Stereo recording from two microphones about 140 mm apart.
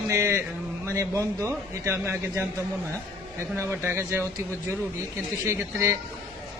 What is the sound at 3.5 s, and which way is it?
Speech, 15° right (ahead or behind).